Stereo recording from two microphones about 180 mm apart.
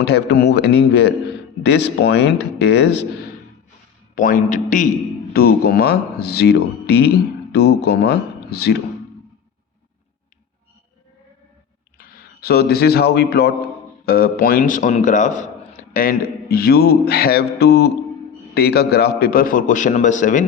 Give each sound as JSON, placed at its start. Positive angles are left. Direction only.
{"t": 0.0, "sound": "speech", "side_deg": 70}
{"t": 4.1, "sound": "a man's voice", "side_deg": 45}
{"t": 5.3, "sound": "a man's voice", "side_deg": 60}
{"t": 11.9, "sound": "a man's voice", "side_deg": 55}